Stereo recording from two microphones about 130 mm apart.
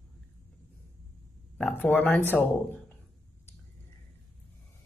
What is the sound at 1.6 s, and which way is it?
Speech, 15° left (ahead or behind).